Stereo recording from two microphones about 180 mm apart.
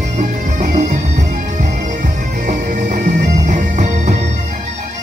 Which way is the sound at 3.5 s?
40° right (ahead or behind).